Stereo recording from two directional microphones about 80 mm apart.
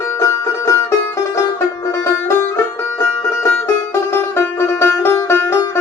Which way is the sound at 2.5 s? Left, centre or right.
Left.